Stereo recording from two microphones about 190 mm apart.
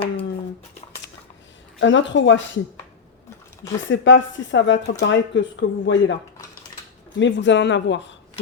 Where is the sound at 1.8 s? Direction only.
75° left (ahead or behind).